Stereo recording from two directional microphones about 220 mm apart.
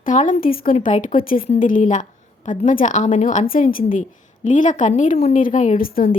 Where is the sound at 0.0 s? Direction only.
35° left (ahead or behind).